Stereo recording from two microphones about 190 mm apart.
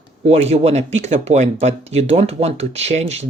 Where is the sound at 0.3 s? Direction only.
35° right (ahead or behind).